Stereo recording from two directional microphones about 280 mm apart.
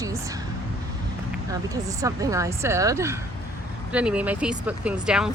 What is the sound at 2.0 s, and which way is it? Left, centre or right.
Speech, centre.